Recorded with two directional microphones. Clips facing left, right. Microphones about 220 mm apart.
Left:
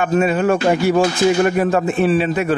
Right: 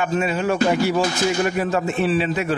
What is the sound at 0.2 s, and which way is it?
A man's voice, 50° left (ahead or behind).